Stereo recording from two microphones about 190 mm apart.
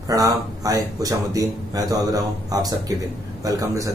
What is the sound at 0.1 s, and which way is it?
A man's voice, 20° right (ahead or behind).